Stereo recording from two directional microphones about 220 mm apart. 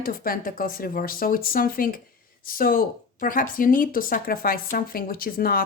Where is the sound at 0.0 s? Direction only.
40° left (ahead or behind).